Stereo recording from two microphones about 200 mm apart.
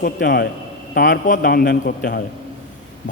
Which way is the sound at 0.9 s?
45° left (ahead or behind).